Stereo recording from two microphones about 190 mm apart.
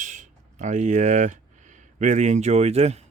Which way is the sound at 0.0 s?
40° right (ahead or behind).